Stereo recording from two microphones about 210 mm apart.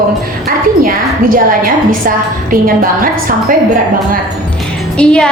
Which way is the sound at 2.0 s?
40° right (ahead or behind).